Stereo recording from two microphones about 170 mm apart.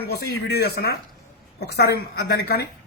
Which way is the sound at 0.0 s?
65° left (ahead or behind).